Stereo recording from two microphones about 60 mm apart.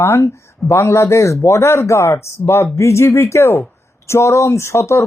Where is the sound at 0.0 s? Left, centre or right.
Left.